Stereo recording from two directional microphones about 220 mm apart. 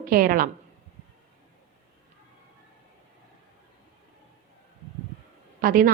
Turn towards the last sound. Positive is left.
turn(degrees=-40)  # may be behind; listen again after turning